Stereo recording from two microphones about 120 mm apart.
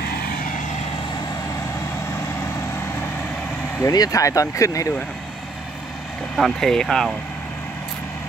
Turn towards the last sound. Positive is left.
turn(degrees=5)  # may be behind; listen again after turning